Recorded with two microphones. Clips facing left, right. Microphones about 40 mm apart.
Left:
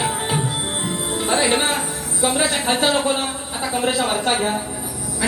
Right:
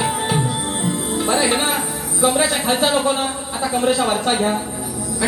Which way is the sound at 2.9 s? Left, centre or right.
Centre.